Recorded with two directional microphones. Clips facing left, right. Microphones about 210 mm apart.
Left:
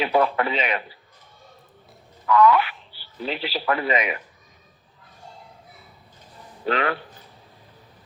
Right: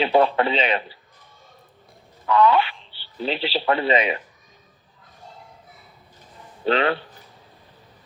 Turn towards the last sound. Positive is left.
turn(degrees=-30)  # may be behind; listen again after turning